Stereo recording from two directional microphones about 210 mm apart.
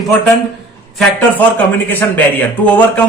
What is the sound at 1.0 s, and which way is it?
A man's voice, 5° left (ahead or behind).